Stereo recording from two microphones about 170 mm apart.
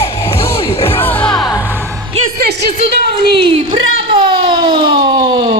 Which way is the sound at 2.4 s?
75° right (ahead or behind).